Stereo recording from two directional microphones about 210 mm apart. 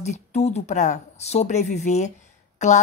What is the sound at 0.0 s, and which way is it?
Speech, 30° left (ahead or behind).